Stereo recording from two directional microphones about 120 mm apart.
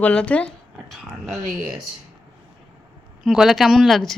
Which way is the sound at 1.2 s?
Centre (ahead or behind).